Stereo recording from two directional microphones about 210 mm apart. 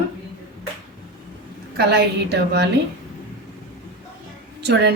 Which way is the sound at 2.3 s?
55° right (ahead or behind).